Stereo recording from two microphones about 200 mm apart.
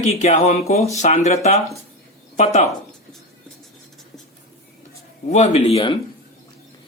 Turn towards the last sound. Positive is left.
turn(degrees=30)  # may be behind; listen again after turning